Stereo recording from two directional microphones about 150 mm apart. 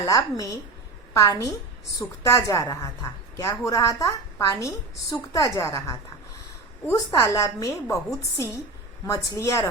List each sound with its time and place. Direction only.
0.0 s a woman's voice: 20° left (ahead or behind)
9.0 s a woman's voice: 20° left (ahead or behind)